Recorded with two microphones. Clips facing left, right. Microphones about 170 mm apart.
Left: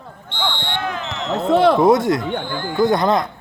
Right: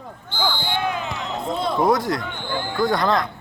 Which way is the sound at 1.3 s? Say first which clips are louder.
Left 12 dB; 70° left (ahead or behind).